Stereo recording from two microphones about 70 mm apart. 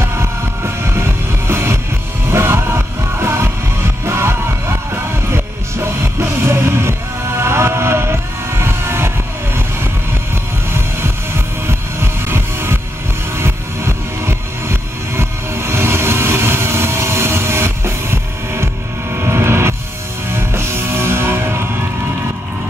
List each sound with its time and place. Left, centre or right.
0.9 s music: right
6.1 s music: right
11.6 s music: right
19.1 s vehicle: right
20.3 s music: right